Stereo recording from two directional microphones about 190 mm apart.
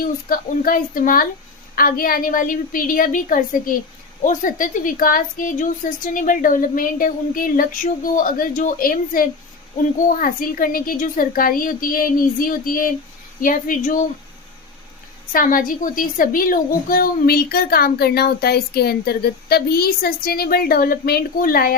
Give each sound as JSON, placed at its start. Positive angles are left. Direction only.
{"t": 0.0, "sound": "a woman's voice", "side_deg": 50}
{"t": 15.3, "sound": "a woman's voice", "side_deg": 45}